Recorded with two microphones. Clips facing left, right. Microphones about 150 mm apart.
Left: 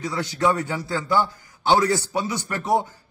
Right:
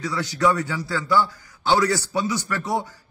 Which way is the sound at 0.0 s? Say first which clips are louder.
Right 1 dB; 20° left (ahead or behind).